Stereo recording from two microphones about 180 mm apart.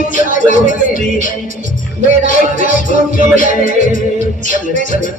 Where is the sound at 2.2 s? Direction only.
50° left (ahead or behind).